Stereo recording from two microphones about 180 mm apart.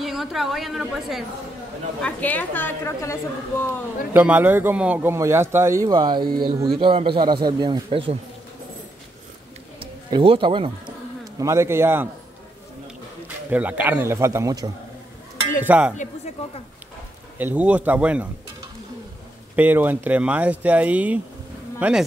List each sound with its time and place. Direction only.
0.0 s a woman's voice: centre (ahead or behind); by 3.7 s 15° left (ahead or behind)
4.1 s a man's voice: 10° right (ahead or behind); by 8.2 s 30° right (ahead or behind)
9.8 s a sound: 30° right (ahead or behind)
11.3 s a man's voice: 15° right (ahead or behind)
13.5 s a man's voice: 10° right (ahead or behind)
15.6 s a man's voice: 10° right (ahead or behind)
16.0 s speech: 40° left (ahead or behind)
17.4 s a man's voice: 10° right (ahead or behind)
19.5 s a man's voice: 10° right (ahead or behind)
21.7 s insect: 10° right (ahead or behind)